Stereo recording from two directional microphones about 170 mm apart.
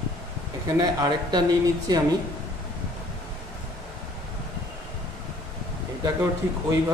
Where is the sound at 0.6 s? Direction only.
20° right (ahead or behind).